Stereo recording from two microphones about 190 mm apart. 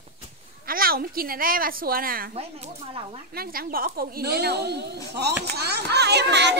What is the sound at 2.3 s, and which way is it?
Speech, 30° right (ahead or behind).